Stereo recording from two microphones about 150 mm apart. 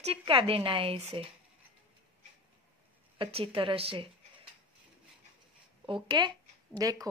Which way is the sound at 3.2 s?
35° right (ahead or behind).